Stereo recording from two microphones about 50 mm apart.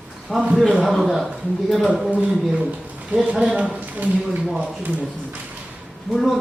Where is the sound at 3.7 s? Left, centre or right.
Right.